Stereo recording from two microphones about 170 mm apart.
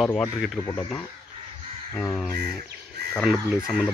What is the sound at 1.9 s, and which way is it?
Speech, centre (ahead or behind).